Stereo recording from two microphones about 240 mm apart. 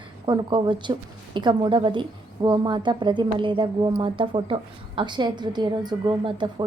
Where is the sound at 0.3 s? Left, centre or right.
Centre.